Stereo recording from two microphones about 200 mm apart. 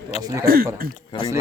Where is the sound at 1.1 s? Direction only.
25° left (ahead or behind).